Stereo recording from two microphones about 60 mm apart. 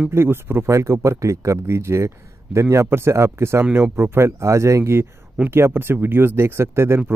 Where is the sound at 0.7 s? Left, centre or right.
Right.